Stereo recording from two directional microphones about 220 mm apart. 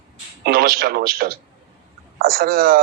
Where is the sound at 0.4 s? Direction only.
45° right (ahead or behind).